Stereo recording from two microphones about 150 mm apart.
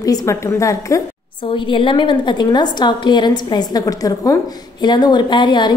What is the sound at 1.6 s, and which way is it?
A woman's voice, 35° left (ahead or behind).